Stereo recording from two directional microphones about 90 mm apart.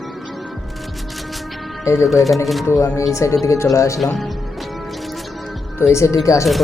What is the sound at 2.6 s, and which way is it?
Speech, 30° left (ahead or behind).